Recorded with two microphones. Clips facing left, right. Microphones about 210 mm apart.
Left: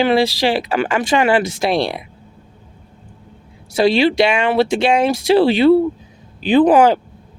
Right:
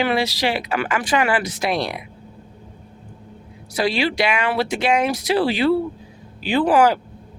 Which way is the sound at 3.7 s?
25° left (ahead or behind).